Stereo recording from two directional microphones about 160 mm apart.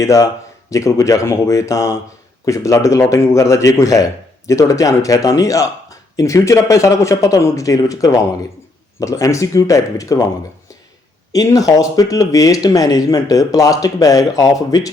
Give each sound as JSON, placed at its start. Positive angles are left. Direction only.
{"t": 0.0, "sound": "speech", "side_deg": 20}
{"t": 11.3, "sound": "speech", "side_deg": 20}